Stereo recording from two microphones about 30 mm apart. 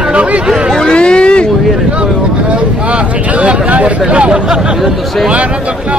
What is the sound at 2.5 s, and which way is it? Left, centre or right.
Vehicle, right.